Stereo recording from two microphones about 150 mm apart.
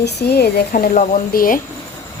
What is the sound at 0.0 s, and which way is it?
Speech, 90° left.